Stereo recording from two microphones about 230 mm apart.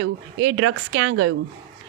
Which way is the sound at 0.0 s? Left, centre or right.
Right.